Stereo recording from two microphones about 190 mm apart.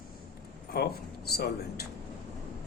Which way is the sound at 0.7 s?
55° left (ahead or behind).